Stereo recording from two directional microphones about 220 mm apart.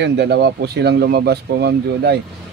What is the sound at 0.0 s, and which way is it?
Speech, 50° right (ahead or behind).